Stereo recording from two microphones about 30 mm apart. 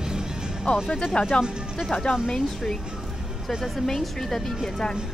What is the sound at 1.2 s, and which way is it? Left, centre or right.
Speech, left.